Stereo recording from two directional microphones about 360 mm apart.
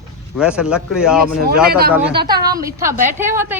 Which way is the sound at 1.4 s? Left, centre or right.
Right.